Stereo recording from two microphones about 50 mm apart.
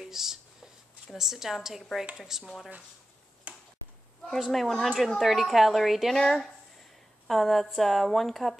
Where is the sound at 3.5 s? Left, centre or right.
Right.